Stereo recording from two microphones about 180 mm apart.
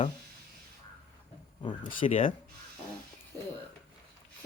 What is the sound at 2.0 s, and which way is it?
Speech, 35° left (ahead or behind).